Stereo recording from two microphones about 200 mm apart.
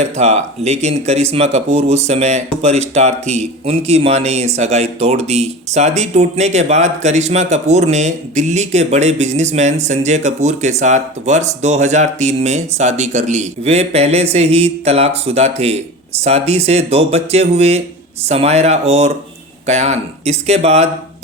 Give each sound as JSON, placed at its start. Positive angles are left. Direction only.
{"t": 0.0, "sound": "speech", "side_deg": -35}